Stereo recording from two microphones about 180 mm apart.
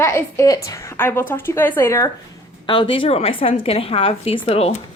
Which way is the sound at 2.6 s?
25° left (ahead or behind).